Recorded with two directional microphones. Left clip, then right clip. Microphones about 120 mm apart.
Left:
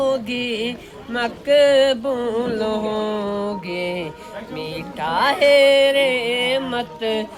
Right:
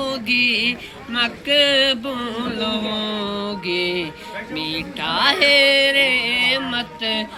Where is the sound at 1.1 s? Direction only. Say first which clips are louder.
Left 1 dB; 35° left (ahead or behind).